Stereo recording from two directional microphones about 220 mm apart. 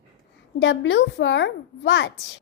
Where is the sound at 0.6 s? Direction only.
55° left (ahead or behind).